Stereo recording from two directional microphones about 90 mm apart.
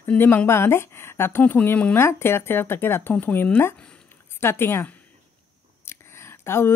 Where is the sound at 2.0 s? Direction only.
30° left (ahead or behind).